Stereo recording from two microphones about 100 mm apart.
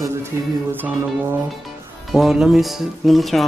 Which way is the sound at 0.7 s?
20° right (ahead or behind).